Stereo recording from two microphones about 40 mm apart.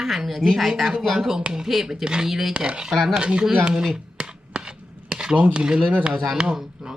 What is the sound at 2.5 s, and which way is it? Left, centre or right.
Speech, right.